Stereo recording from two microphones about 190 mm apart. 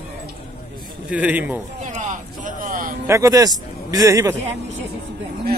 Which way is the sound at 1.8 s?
40° right (ahead or behind).